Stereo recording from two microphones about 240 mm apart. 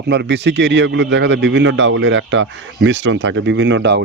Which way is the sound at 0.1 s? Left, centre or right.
Right.